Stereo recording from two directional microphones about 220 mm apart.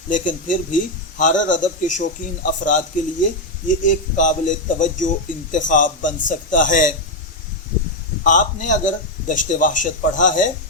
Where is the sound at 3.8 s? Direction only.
35° left (ahead or behind).